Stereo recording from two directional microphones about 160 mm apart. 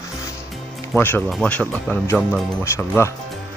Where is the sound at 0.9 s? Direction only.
10° left (ahead or behind).